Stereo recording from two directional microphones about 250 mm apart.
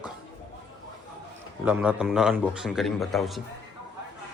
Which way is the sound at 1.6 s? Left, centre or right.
Centre.